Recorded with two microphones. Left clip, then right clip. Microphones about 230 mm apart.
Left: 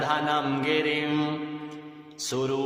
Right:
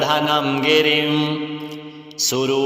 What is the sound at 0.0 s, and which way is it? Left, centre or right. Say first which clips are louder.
Mantra: right 7 dB; right.